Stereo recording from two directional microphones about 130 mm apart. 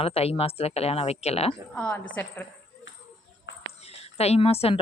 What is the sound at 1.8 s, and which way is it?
Speech, 10° left (ahead or behind).